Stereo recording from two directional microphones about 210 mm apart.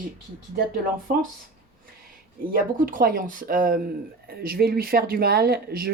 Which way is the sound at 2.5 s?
40° right (ahead or behind).